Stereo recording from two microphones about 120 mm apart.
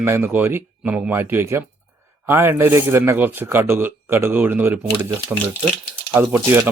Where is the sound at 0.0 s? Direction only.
15° right (ahead or behind).